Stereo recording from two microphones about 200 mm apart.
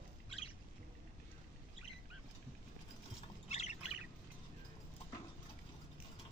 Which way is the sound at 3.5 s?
35° left (ahead or behind).